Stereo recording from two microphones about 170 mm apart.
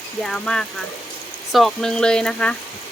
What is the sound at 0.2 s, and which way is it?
Speech, 5° left (ahead or behind).